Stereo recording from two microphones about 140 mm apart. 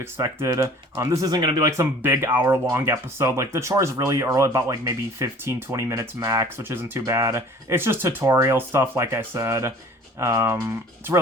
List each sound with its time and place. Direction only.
0.0 s speech: 20° right (ahead or behind)